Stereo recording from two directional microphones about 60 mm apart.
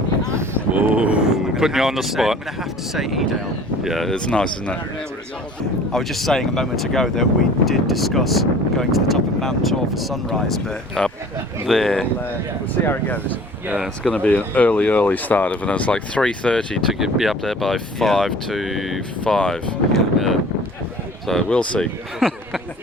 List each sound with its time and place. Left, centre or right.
0.7 s vehicle: right; by 2.4 s centre
2.9 s speech: centre
4.1 s speech: centre
5.9 s speech: centre
12.8 s speech: left
13.7 s speech: centre
14.1 s speech: left
17.0 s speech: centre
19.2 s speech: centre
21.5 s speech: centre
22.2 s speech: centre